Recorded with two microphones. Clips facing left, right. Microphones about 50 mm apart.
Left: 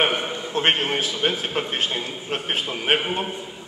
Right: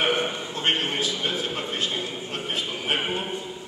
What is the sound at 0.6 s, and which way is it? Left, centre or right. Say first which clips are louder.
A man's voice: left 4 dB; left.